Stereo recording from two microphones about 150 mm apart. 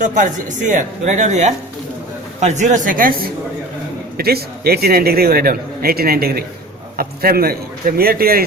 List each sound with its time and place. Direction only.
0.0 s speech: 55° right (ahead or behind); by 3.2 s 75° right (ahead or behind)
4.2 s a man's voice: 90° right